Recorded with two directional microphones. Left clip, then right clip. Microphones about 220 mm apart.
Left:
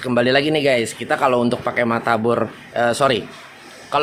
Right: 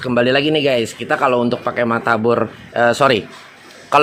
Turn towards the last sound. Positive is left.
turn(degrees=-20)  # may be behind; listen again after turning